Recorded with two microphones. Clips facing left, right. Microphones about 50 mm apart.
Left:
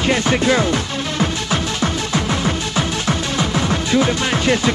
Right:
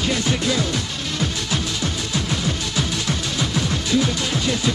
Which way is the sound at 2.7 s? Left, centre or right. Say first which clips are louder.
Left 4 dB; left.